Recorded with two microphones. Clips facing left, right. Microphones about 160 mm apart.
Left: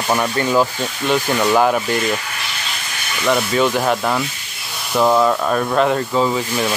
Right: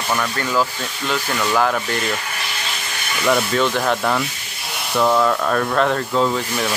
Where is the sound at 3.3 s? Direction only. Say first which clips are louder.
Left 2 dB; 5° left (ahead or behind).